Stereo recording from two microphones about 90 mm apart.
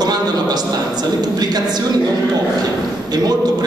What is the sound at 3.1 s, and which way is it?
Speech, 45° right (ahead or behind).